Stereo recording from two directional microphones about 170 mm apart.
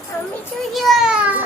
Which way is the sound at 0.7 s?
Centre (ahead or behind).